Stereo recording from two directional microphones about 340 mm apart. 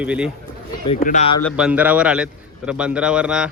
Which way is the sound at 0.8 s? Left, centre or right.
Centre.